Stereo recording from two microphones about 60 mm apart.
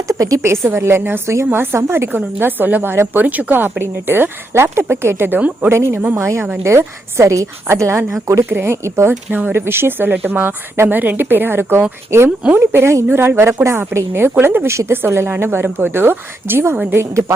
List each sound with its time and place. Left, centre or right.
0.1 s a woman's voice: right
0.4 s a woman's voice: right
2.1 s a woman's voice: right